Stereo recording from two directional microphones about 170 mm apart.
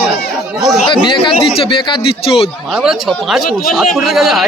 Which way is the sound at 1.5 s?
30° left (ahead or behind).